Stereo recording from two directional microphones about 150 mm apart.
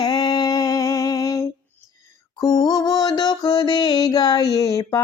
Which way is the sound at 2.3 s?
25° left (ahead or behind).